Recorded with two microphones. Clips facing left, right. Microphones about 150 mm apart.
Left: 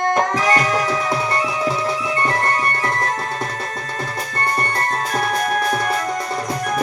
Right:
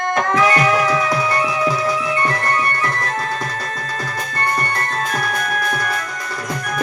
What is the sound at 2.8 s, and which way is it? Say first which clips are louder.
Music: even; 25° left (ahead or behind).